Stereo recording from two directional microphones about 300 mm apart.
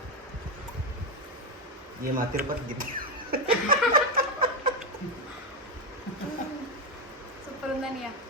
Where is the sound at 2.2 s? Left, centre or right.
Right.